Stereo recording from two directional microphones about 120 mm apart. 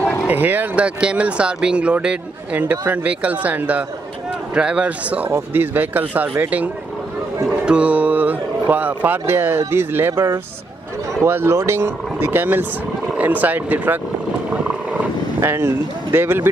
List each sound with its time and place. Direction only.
0.3 s speech: 15° right (ahead or behind)
15.4 s speech: 20° right (ahead or behind)